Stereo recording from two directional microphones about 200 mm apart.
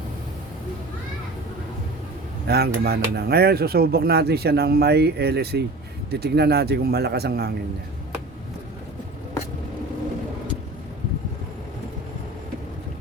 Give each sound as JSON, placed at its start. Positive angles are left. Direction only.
{"t": 2.5, "sound": "speech", "side_deg": -50}